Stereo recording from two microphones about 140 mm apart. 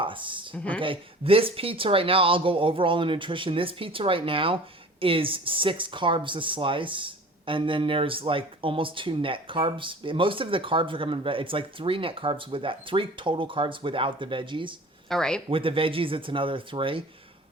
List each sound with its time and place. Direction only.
0.0 s speech: 35° right (ahead or behind)
0.5 s speech: 10° left (ahead or behind)
0.8 s speech: 40° right (ahead or behind)
15.1 s speech: 5° left (ahead or behind)
15.4 s speech: 40° right (ahead or behind)